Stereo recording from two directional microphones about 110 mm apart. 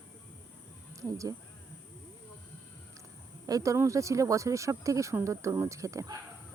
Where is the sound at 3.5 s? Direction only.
30° right (ahead or behind).